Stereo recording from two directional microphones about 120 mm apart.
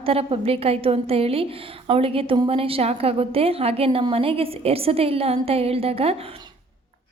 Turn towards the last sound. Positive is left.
turn(degrees=-55)  # may be behind; listen again after turning